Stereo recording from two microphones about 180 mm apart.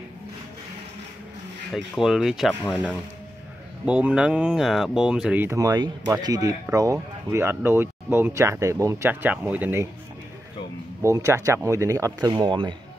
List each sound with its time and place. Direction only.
1.7 s speech: centre (ahead or behind)
3.8 s speech: 5° right (ahead or behind)
11.0 s speech: 15° right (ahead or behind)